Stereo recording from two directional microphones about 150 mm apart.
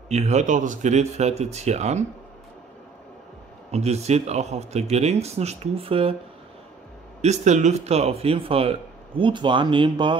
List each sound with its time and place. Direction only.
0.1 s speech: 50° right (ahead or behind)
3.7 s speech: 45° right (ahead or behind)
7.2 s speech: 50° right (ahead or behind); by 10.1 s 30° right (ahead or behind)